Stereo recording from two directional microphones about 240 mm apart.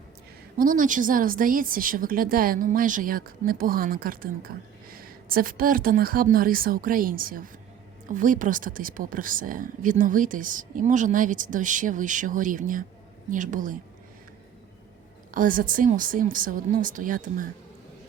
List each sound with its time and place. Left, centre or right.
0.6 s speech: right
15.3 s speech: right